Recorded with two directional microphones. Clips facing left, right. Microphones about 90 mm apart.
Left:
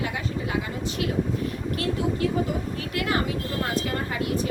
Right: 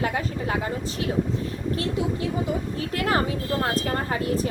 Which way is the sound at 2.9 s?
35° right (ahead or behind).